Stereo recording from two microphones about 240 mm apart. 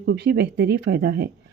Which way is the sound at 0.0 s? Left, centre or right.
Right.